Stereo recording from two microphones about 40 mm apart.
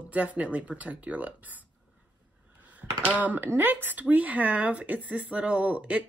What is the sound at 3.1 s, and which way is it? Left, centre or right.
Speech, right.